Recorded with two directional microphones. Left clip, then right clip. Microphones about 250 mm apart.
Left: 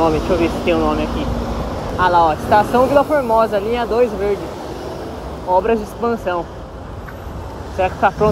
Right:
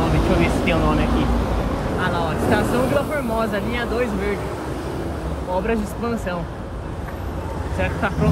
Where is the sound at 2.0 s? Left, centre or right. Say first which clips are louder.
Left 11 dB; centre.